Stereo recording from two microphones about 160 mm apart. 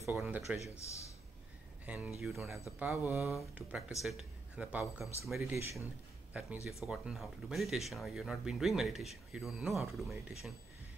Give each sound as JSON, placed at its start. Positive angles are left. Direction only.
{"t": 0.1, "sound": "speech", "side_deg": -5}
{"t": 0.7, "sound": "a man's voice", "side_deg": 20}
{"t": 1.9, "sound": "speech", "side_deg": -5}
{"t": 2.8, "sound": "speech", "side_deg": -15}
{"t": 3.5, "sound": "speech", "side_deg": -5}
{"t": 5.4, "sound": "speech", "side_deg": -15}